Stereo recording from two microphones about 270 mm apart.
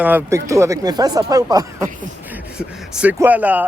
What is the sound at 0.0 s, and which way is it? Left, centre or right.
Speech, centre.